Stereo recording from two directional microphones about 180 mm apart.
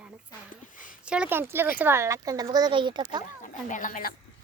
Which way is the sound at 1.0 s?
5° right (ahead or behind).